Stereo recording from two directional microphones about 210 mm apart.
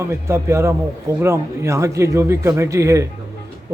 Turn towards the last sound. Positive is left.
turn(degrees=-15)  # may be behind; listen again after turning